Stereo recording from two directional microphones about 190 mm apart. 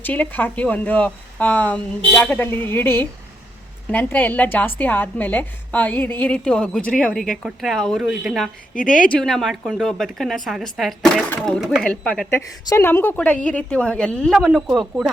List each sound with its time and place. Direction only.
0.0 s a woman's voice: 10° left (ahead or behind)
8.7 s a woman's voice: 45° left (ahead or behind)
9.0 s a woman's voice: 5° left (ahead or behind)
12.3 s a woman's voice: 15° left (ahead or behind); by 15.1 s centre (ahead or behind)